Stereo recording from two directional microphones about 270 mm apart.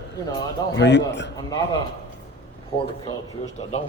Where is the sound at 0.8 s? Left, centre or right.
Left.